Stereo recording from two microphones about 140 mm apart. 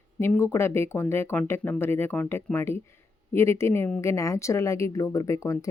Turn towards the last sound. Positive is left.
turn(degrees=20)  # may be behind; listen again after turning